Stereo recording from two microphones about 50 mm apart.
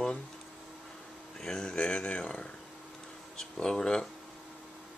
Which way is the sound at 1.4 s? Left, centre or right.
Centre.